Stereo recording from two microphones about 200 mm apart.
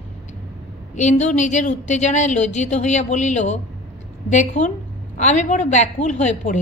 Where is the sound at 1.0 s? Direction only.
35° left (ahead or behind).